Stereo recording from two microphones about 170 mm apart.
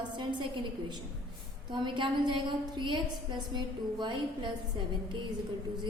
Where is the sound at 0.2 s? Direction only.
25° right (ahead or behind).